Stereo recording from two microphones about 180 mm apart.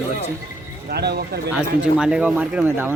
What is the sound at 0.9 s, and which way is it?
Speech, 65° right (ahead or behind).